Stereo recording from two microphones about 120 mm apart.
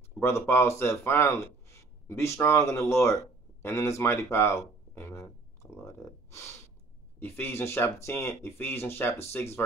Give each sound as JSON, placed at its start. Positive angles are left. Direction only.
{"t": 0.2, "sound": "speech", "side_deg": 20}